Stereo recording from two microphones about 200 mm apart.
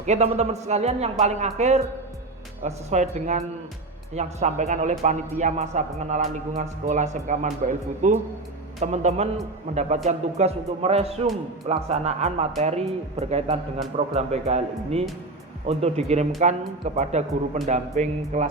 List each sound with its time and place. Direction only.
0.0 s a man's voice: 35° right (ahead or behind)